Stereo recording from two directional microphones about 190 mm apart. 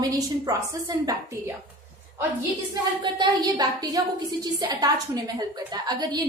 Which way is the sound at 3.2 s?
20° right (ahead or behind).